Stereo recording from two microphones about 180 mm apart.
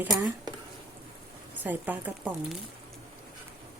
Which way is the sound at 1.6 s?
10° right (ahead or behind).